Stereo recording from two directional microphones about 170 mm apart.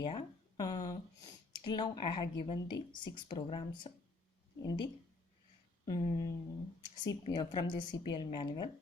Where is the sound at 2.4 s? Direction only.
30° left (ahead or behind).